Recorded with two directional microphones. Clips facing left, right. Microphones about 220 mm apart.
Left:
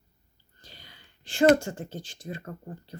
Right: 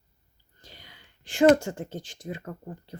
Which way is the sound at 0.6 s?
20° right (ahead or behind).